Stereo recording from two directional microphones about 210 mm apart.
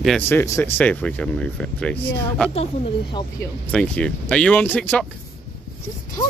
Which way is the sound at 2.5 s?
25° left (ahead or behind).